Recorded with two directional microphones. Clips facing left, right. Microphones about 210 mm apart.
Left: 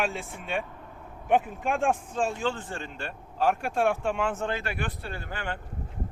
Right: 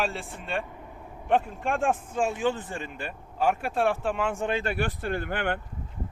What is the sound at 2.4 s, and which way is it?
Speech, 20° right (ahead or behind).